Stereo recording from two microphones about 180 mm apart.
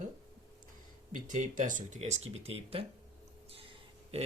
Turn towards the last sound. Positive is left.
turn(degrees=-30)  # may be behind; listen again after turning